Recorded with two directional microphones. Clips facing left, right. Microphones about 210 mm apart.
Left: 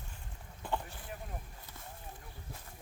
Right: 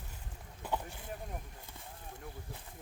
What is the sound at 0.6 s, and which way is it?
Boat, 10° right (ahead or behind).